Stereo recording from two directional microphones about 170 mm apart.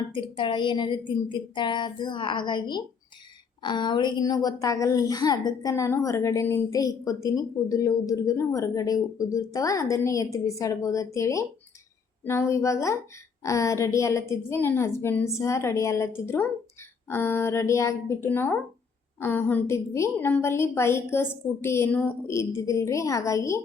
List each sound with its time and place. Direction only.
0.1 s a woman's voice: 30° left (ahead or behind)